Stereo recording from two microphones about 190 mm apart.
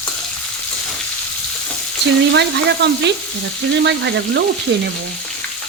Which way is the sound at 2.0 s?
60° right (ahead or behind).